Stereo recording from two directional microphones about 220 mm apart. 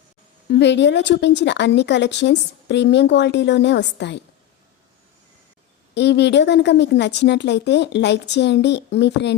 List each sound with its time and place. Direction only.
0.5 s speech: 50° left (ahead or behind)
5.9 s speech: 50° left (ahead or behind)